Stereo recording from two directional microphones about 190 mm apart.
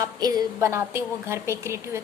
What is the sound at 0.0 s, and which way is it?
A woman's voice, 20° right (ahead or behind).